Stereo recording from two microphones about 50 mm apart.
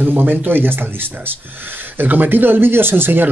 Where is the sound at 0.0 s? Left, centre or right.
Right.